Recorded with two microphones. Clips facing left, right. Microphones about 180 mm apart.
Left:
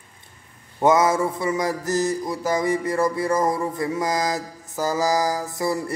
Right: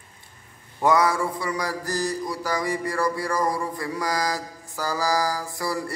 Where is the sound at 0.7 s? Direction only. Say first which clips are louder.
Left 3 dB; 20° left (ahead or behind).